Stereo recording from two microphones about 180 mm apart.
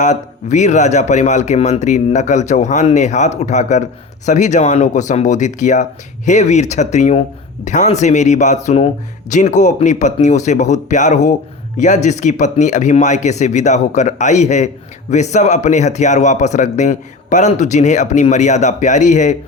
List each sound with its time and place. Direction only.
0.0 s speech: 40° left (ahead or behind)